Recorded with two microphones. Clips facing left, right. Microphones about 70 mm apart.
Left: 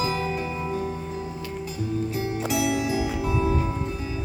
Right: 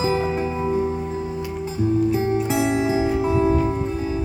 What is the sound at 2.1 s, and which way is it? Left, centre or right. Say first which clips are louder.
Music: right 6 dB; right.